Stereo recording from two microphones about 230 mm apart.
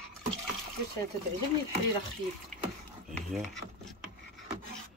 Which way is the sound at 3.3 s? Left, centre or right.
Centre.